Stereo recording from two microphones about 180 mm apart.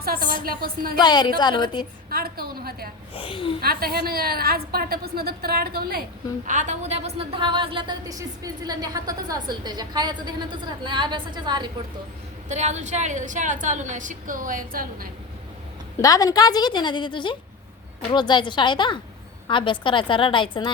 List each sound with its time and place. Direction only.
0.4 s a woman's voice: 55° right (ahead or behind)
0.9 s a woman's voice: 25° left (ahead or behind)
2.0 s a woman's voice: 55° right (ahead or behind)
3.2 s a woman's voice: 30° left (ahead or behind)
3.6 s a woman's voice: 55° right (ahead or behind); by 11.7 s 25° right (ahead or behind)
12.5 s a woman's voice: 40° right (ahead or behind)
16.0 s a woman's voice: 20° left (ahead or behind)